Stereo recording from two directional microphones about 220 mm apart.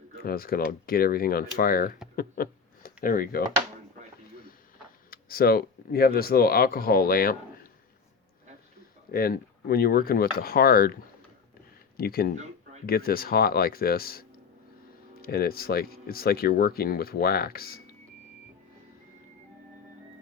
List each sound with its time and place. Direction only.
0.2 s speech: 40° left (ahead or behind)
2.1 s a sound: 40° left (ahead or behind)
5.1 s speech: 40° left (ahead or behind)
9.1 s speech: 45° left (ahead or behind)
11.9 s speech: 45° left (ahead or behind)